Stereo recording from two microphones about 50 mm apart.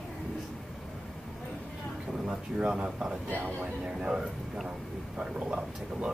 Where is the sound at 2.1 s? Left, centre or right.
Centre.